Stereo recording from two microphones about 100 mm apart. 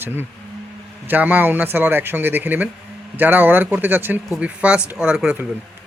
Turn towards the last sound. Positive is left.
turn(degrees=-10)  # may be behind; listen again after turning